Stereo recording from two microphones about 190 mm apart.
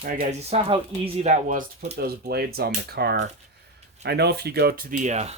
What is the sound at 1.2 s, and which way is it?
Speech, 40° right (ahead or behind).